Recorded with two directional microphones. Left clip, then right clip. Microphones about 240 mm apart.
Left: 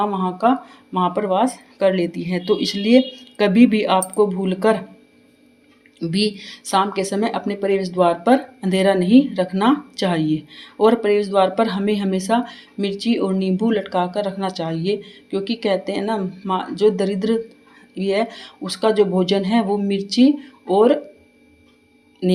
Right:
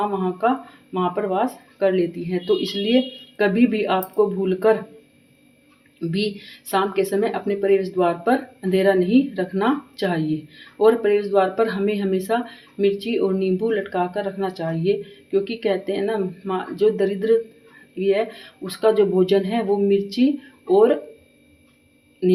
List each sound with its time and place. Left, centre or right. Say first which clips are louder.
0.0 s speech: left 3 dB; left
6.0 s speech: left 3 dB; left
22.2 s speech: right 2 dB; left